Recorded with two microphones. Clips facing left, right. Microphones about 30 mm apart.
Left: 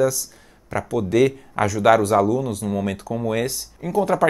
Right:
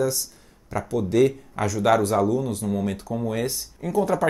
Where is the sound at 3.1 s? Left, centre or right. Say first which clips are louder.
Left 2 dB; left.